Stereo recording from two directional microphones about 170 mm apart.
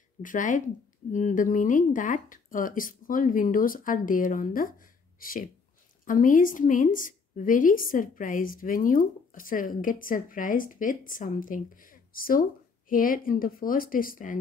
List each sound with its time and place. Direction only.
0.2 s a woman's voice: 50° left (ahead or behind)